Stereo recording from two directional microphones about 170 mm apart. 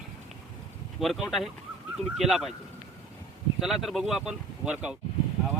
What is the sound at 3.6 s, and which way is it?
Speech, centre (ahead or behind).